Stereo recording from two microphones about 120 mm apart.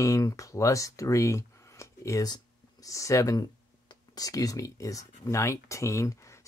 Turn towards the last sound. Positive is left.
turn(degrees=25)  # may be behind; listen again after turning